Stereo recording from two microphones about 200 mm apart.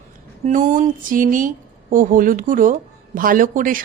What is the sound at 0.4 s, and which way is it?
A woman's voice, 35° right (ahead or behind).